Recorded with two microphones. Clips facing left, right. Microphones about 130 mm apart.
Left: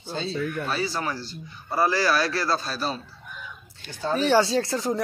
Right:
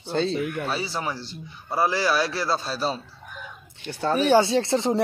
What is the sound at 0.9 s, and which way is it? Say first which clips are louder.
A man's voice: even; 25° right (ahead or behind).